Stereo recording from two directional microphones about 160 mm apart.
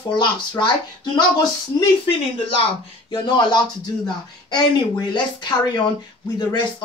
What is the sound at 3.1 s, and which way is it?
Speech, 30° left (ahead or behind).